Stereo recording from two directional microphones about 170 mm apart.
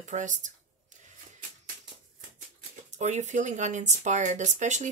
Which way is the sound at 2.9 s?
45° right (ahead or behind).